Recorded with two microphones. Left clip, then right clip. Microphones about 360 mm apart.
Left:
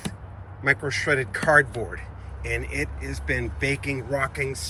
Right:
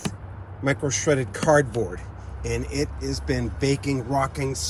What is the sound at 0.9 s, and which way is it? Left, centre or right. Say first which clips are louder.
Speech: even; centre.